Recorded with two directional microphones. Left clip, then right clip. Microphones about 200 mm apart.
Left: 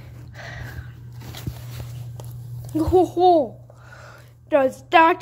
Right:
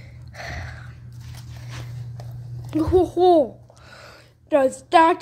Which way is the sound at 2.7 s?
Centre (ahead or behind).